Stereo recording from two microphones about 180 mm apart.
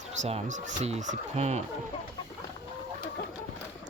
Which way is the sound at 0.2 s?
40° right (ahead or behind).